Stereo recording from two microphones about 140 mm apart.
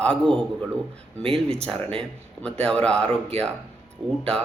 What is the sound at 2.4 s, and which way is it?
A man's voice, 5° left (ahead or behind).